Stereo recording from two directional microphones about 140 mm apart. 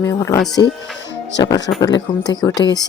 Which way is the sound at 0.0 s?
20° left (ahead or behind).